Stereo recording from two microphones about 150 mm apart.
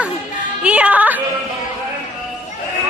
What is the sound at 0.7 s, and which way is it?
Speech, 10° right (ahead or behind).